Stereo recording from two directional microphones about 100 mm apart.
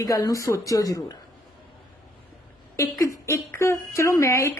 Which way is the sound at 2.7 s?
35° left (ahead or behind).